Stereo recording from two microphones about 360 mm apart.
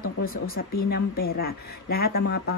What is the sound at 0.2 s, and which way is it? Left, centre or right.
A woman's voice, left.